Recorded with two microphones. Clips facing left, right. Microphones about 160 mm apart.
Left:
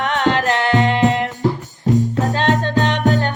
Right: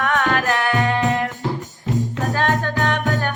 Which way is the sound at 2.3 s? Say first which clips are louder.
Left 3 dB; 20° left (ahead or behind).